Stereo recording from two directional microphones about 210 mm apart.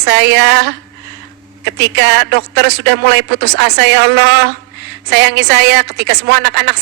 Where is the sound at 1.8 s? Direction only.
55° right (ahead or behind).